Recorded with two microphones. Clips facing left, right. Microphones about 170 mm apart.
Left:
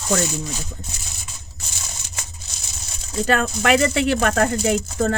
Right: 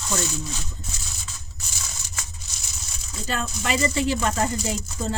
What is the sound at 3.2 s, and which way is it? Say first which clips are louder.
Speech: left 9 dB; 70° left (ahead or behind).